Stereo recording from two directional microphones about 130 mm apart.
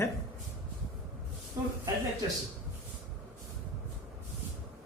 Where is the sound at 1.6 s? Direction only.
20° right (ahead or behind).